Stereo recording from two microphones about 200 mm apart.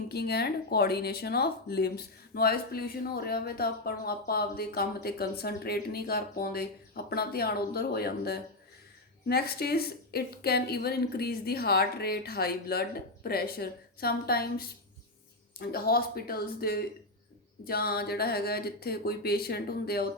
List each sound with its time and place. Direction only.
0.1 s speech: 55° left (ahead or behind)